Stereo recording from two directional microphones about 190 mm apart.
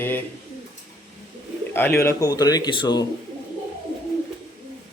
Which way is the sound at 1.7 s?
10° left (ahead or behind).